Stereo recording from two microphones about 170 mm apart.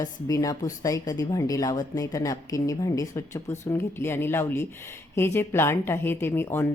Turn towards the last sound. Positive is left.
turn(degrees=15)  # may be behind; listen again after turning